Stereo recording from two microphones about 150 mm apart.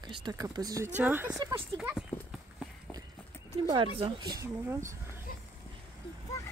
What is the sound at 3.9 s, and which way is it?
Speech, 35° right (ahead or behind).